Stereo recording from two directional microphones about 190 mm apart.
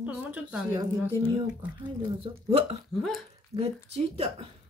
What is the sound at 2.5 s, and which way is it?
Speech, 30° right (ahead or behind).